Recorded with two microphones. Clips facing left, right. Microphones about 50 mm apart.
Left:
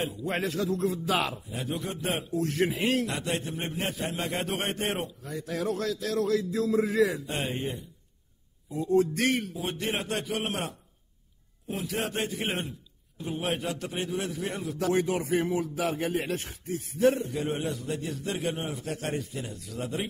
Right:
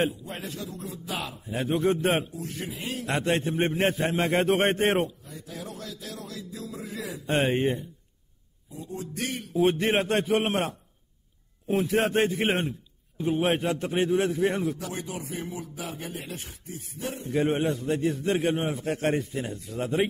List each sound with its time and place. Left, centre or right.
0.3 s a man's voice: left
1.5 s a man's voice: right
2.3 s a man's voice: left
3.1 s a man's voice: right
5.2 s a man's voice: left
7.2 s a man's voice: right
8.7 s a man's voice: left
9.5 s a man's voice: right
14.8 s a man's voice: left
17.3 s a man's voice: right